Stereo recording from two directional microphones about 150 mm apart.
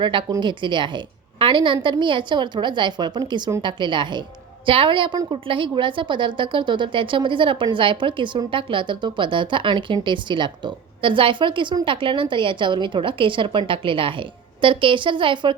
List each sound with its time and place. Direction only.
0.0 s a woman's voice: 35° right (ahead or behind)